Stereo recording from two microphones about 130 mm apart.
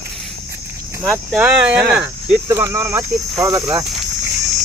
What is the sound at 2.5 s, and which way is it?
Speech, 20° right (ahead or behind).